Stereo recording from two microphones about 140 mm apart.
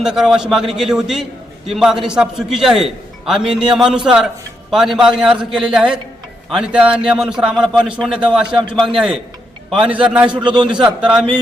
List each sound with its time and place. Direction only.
0.0 s a man's voice: 5° right (ahead or behind)
9.6 s a man's voice: 5° right (ahead or behind)
10.3 s a man's voice: 35° right (ahead or behind)
10.8 s a man's voice: 5° right (ahead or behind)